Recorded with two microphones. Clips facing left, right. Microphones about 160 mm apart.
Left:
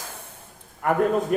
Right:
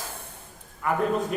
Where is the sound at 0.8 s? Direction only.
55° left (ahead or behind).